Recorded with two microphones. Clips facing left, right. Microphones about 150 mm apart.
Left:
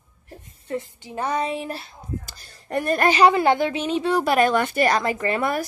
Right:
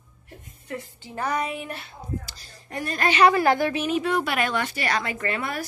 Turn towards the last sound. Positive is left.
turn(degrees=45)  # may be behind; listen again after turning